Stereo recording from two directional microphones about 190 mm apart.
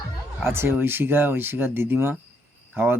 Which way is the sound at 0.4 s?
10° right (ahead or behind).